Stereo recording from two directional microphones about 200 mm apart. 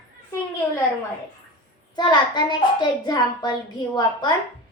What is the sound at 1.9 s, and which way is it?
A child's voice, 20° left (ahead or behind).